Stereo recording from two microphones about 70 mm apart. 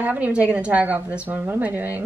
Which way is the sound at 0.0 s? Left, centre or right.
Right.